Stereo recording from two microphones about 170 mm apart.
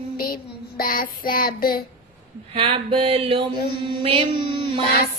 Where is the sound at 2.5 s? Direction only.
35° right (ahead or behind).